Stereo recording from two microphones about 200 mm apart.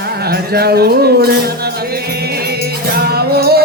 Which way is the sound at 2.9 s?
50° right (ahead or behind).